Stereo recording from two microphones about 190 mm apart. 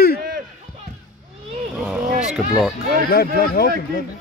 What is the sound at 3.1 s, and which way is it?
Speech, 55° left (ahead or behind).